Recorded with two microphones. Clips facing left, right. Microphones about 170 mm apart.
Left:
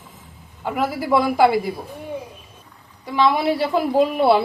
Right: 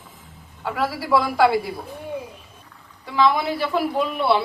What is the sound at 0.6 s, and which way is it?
Speech, 20° left (ahead or behind).